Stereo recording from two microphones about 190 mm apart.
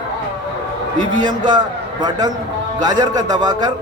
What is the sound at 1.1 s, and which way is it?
Speech, 20° right (ahead or behind).